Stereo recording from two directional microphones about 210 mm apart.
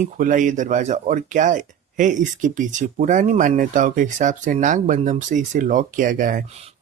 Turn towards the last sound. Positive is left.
turn(degrees=-40)  # may be behind; listen again after turning